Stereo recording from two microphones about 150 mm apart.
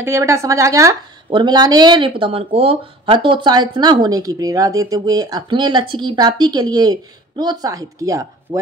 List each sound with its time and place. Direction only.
0.0 s speech: 20° right (ahead or behind)